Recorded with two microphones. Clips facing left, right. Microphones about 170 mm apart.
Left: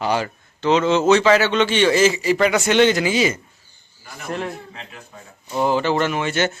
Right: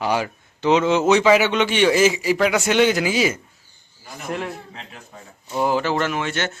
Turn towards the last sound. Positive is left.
turn(degrees=5)  # may be behind; listen again after turning